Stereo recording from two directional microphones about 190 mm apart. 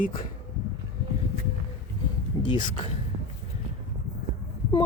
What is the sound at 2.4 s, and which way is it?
Speech, 25° left (ahead or behind).